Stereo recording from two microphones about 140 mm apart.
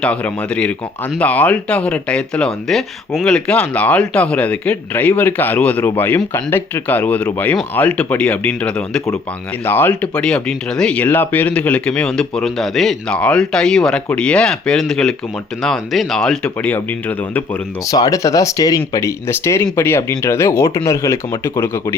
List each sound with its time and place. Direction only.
0.0 s speech: 10° left (ahead or behind)
17.8 s speech: 25° left (ahead or behind)